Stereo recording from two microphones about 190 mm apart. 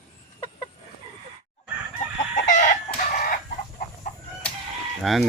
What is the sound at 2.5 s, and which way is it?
Chicken, 45° left (ahead or behind).